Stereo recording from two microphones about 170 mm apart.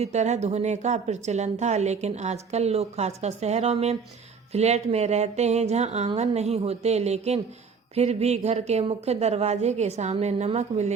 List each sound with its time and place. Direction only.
0.0 s a woman's voice: 40° right (ahead or behind)